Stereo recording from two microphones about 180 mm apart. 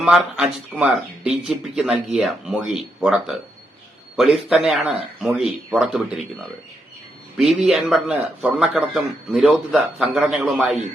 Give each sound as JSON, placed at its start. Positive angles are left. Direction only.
{"t": 0.0, "sound": "a man's voice", "side_deg": -5}
{"t": 7.3, "sound": "a man's voice", "side_deg": 0}